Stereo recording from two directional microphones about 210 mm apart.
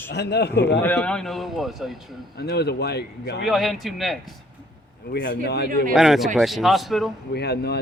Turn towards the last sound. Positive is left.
turn(degrees=50)  # may be behind; listen again after turning